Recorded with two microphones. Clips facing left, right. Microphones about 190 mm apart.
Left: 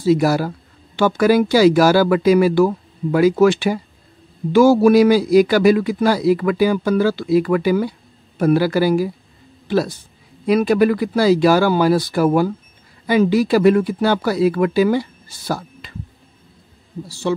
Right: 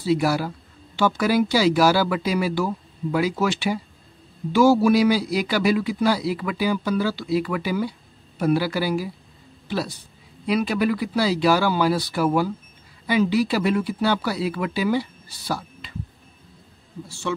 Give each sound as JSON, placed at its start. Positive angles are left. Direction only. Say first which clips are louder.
{"t": 0.0, "sound": "a man's voice", "louder": "left 6 dB", "side_deg": 45}